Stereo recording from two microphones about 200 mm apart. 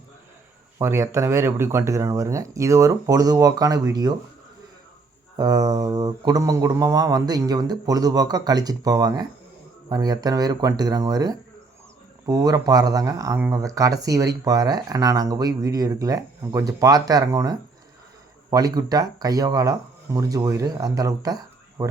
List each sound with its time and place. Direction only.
0.8 s speech: 15° right (ahead or behind)
5.4 s speech: 20° right (ahead or behind)
18.5 s speech: 20° right (ahead or behind)